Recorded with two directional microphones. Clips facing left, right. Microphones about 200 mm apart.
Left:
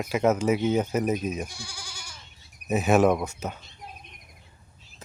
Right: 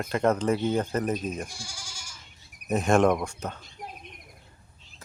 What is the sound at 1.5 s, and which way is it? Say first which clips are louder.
Goat: left 1 dB; 60° left (ahead or behind).